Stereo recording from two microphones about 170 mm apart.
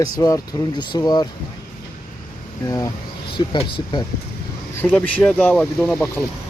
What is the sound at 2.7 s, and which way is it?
Speech, 20° left (ahead or behind).